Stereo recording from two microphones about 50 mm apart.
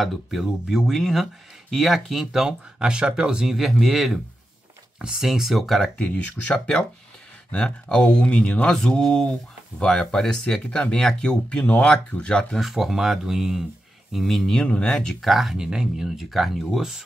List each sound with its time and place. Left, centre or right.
0.0 s speech: centre
2.4 s speech: centre
5.9 s speech: left
12.5 s speech: centre
14.7 s speech: centre
15.2 s speech: centre